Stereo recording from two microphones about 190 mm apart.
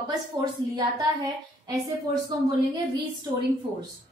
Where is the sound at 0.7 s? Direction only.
20° right (ahead or behind).